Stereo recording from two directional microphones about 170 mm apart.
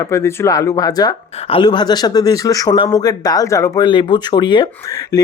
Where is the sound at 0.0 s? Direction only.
15° left (ahead or behind).